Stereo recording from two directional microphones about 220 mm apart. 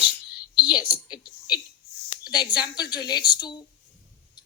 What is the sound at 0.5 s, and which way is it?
A woman's voice, 20° left (ahead or behind).